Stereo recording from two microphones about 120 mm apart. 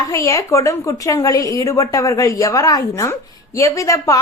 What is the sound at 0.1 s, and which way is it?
A woman's voice, 25° left (ahead or behind).